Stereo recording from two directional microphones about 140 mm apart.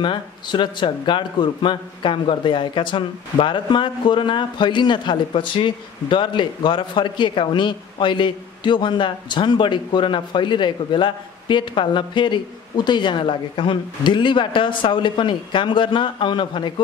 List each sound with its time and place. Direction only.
0.0 s a man's voice: 35° left (ahead or behind)